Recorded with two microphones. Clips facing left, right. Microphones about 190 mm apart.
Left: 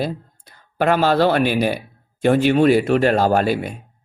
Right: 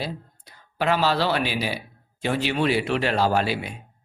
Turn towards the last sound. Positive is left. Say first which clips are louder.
# left 6 dB
turn(degrees=50)  # may be behind; listen again after turning